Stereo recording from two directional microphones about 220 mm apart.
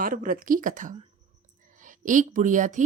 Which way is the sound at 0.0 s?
40° right (ahead or behind).